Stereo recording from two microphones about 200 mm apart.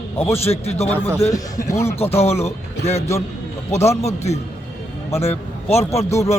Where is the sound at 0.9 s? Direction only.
10° left (ahead or behind).